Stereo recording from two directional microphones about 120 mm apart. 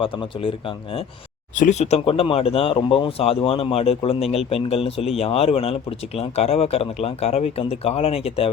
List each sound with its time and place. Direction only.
0.0 s speech: 50° left (ahead or behind)
1.5 s speech: 80° left; by 8.4 s 55° left (ahead or behind)